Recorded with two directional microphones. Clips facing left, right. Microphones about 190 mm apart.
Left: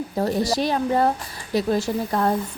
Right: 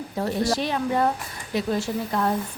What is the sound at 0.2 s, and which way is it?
A woman's voice, 40° left (ahead or behind).